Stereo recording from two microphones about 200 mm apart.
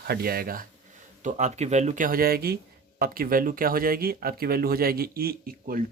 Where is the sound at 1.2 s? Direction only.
35° right (ahead or behind).